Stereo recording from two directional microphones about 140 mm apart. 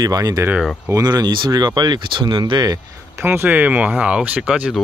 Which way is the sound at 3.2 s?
15° right (ahead or behind).